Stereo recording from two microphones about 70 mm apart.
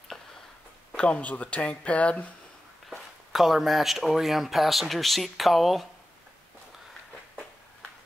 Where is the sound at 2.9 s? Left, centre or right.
Centre.